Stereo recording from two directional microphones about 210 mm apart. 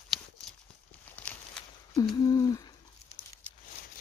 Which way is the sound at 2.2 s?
20° left (ahead or behind).